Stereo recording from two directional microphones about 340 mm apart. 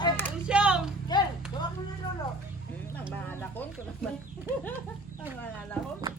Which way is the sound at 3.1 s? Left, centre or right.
Centre.